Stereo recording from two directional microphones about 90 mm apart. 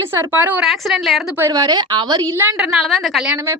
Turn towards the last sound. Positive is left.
turn(degrees=0)  # may be behind; listen again after turning